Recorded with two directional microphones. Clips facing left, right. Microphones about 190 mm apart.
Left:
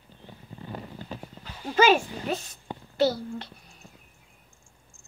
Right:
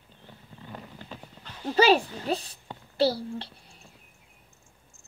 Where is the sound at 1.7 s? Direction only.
35° right (ahead or behind).